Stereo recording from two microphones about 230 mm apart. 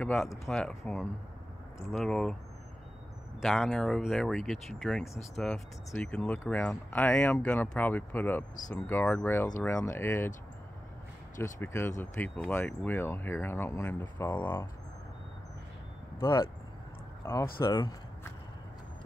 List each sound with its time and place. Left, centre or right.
0.0 s speech: centre
3.3 s speech: centre
11.3 s speech: centre
16.2 s speech: centre
17.2 s a sound: centre
17.6 s speech: centre